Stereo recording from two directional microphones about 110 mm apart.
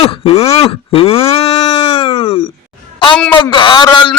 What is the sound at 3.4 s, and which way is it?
Speech, 45° left (ahead or behind).